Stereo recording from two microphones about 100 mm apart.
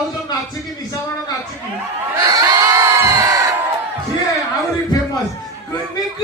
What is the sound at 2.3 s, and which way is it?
Crowd, 35° right (ahead or behind).